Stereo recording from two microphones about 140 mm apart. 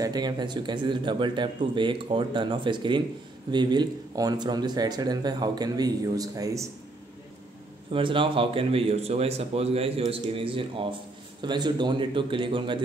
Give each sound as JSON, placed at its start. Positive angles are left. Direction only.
{"t": 0.0, "sound": "a man's voice", "side_deg": -30}
{"t": 7.9, "sound": "a man's voice", "side_deg": -35}